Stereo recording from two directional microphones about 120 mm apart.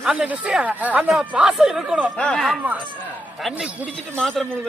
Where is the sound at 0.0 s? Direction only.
10° right (ahead or behind).